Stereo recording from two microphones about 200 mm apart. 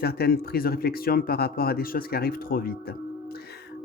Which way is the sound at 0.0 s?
50° left (ahead or behind).